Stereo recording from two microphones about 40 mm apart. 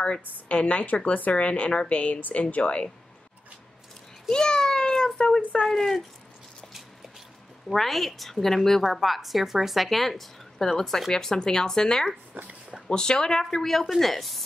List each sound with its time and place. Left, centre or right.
0.6 s a woman's voice: left
1.9 s a woman's voice: left
4.3 s a child's voice: centre
5.7 s a woman's voice: centre
7.7 s a child's voice: centre